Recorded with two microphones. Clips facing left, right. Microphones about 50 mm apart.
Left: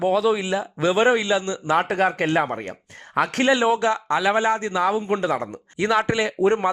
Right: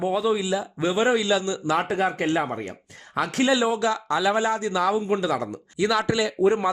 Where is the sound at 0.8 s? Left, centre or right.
Left.